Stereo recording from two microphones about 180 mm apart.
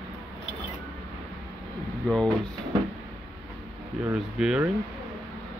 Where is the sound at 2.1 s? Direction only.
5° left (ahead or behind).